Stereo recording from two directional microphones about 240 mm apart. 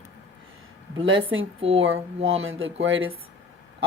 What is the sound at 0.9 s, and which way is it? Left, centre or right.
A woman's voice, right.